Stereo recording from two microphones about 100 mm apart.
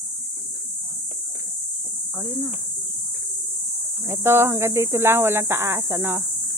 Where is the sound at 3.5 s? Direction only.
Centre (ahead or behind).